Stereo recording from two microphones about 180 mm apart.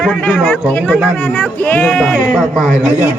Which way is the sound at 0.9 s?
5° right (ahead or behind).